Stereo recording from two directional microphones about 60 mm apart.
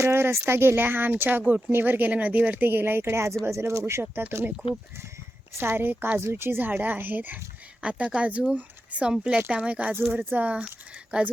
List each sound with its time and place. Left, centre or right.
0.0 s speech: right
4.0 s speech: right
5.5 s speech: right
7.8 s speech: centre
10.1 s speech: right